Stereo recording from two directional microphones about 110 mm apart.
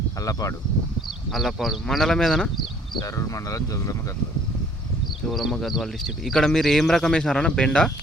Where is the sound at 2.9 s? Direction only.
30° left (ahead or behind).